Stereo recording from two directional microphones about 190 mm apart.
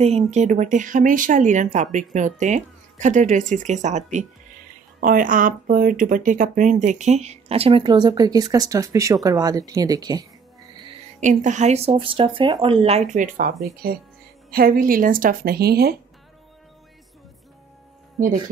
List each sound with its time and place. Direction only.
0.0 s speech: 35° right (ahead or behind); by 10.2 s 20° right (ahead or behind)
11.1 s speech: 40° right (ahead or behind)
14.5 s speech: 50° right (ahead or behind)